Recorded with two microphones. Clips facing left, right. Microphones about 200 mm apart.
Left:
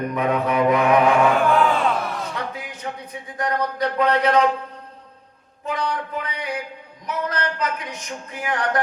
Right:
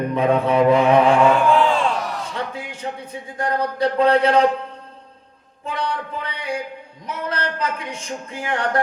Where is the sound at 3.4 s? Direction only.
30° right (ahead or behind).